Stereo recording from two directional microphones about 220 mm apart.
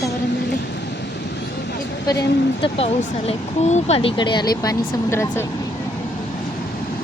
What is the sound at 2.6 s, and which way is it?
Speech, 25° left (ahead or behind).